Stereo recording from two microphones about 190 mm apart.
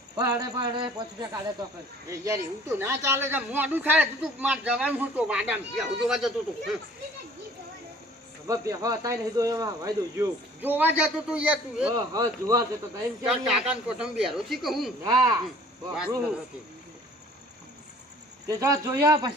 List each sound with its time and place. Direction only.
0.2 s speech: 20° right (ahead or behind); by 6.3 s centre (ahead or behind)
8.4 s speech: 15° right (ahead or behind)
12.1 s speech: 20° right (ahead or behind)
13.2 s speech: centre (ahead or behind)
15.0 s speech: 15° right (ahead or behind)
15.9 s speech: 5° right (ahead or behind)
18.4 s speech: 20° right (ahead or behind)